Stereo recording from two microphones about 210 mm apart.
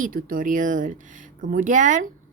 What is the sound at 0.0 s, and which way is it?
A woman's voice, 40° right (ahead or behind).